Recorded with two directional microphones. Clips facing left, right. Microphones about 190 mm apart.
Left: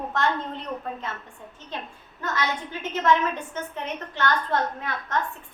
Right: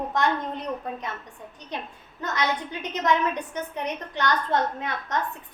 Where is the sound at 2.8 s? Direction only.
15° right (ahead or behind).